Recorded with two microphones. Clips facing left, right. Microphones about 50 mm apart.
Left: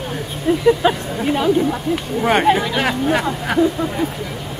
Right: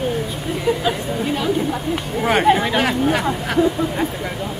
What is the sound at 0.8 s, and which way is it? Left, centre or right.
Speech, left.